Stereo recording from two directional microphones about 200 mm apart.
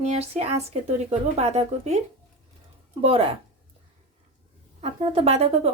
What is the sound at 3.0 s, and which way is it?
Speech, 30° right (ahead or behind).